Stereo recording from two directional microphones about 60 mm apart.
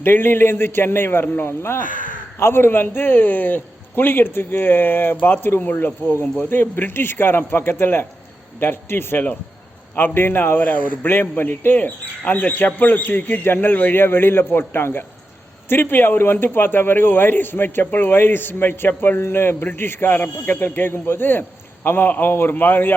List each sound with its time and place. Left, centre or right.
0.0 s a man's voice: left
6.2 s speech: left
6.5 s a man's voice: left